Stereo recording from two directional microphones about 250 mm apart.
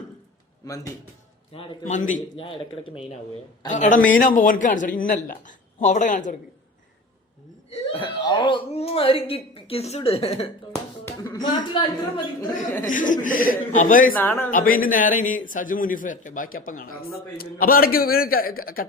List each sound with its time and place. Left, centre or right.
1.5 s a man's voice: left
7.9 s speech: centre
11.0 s a sound: centre
11.5 s a woman's voice: centre
12.9 s a man's voice: left
14.2 s a woman's voice: centre
14.5 s a man's voice: left